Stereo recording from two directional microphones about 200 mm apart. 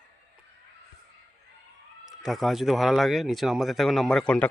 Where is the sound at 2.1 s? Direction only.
Centre (ahead or behind).